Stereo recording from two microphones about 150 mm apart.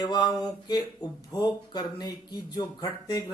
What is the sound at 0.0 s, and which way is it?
A man's voice, 30° left (ahead or behind).